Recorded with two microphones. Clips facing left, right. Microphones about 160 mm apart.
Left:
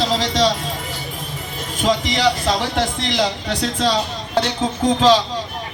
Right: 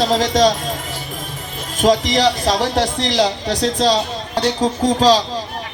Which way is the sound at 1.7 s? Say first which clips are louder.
Right 5 dB; 45° right (ahead or behind).